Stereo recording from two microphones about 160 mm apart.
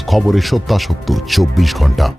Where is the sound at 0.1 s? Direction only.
Centre (ahead or behind).